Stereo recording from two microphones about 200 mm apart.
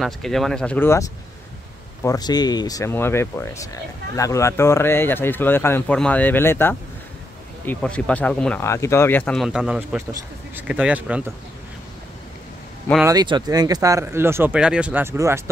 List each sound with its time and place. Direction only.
0.0 s speech: centre (ahead or behind)
2.0 s speech: 20° left (ahead or behind); by 11.3 s 5° right (ahead or behind)
13.0 s speech: 20° right (ahead or behind)